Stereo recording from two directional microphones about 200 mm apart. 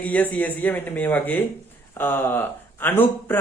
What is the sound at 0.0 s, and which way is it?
Speech, 10° left (ahead or behind).